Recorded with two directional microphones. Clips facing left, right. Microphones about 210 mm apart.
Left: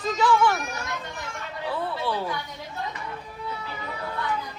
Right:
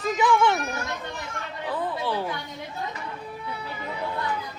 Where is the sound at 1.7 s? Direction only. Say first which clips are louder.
Right 1 dB; 15° right (ahead or behind).